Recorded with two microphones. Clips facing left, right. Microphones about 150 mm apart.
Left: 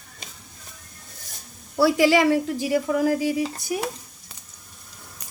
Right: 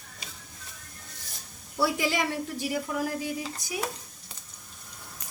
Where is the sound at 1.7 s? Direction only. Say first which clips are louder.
Left 9 dB; 90° left.